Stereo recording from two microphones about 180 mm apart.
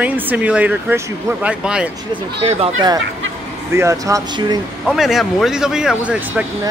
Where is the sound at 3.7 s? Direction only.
15° right (ahead or behind).